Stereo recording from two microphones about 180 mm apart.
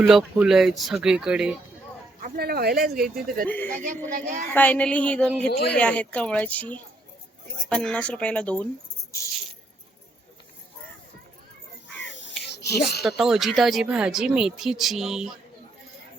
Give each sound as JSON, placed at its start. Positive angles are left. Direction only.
{"t": 0.0, "sound": "speech", "side_deg": 0}
{"t": 2.2, "sound": "speech", "side_deg": -55}
{"t": 4.5, "sound": "speech", "side_deg": 10}
{"t": 5.5, "sound": "speech", "side_deg": 65}
{"t": 5.7, "sound": "speech", "side_deg": 5}
{"t": 11.9, "sound": "a sound", "side_deg": 90}
{"t": 12.5, "sound": "a sound", "side_deg": 65}
{"t": 12.8, "sound": "speech", "side_deg": 0}